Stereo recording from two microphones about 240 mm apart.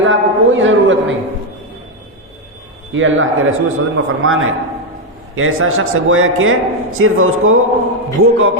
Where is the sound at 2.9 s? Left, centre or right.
Right.